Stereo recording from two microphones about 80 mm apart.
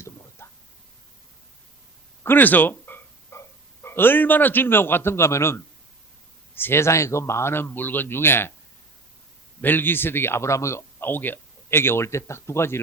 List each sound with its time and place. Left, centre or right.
0.4 s a sound: left
2.2 s dog: left
3.8 s a man's voice: left
9.6 s speech: left